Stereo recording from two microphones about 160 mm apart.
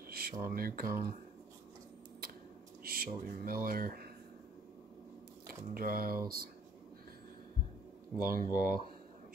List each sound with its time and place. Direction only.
0.1 s speech: 65° right (ahead or behind)
2.8 s speech: 70° right (ahead or behind)
5.5 s speech: 65° right (ahead or behind)
8.2 s speech: 60° right (ahead or behind)